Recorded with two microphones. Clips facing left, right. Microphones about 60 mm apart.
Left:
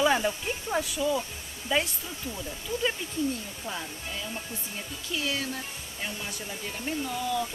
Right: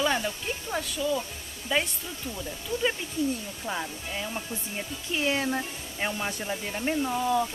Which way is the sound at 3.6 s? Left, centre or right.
Right.